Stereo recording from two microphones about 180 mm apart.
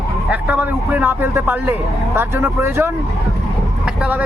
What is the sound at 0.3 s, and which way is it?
Speech, 10° right (ahead or behind).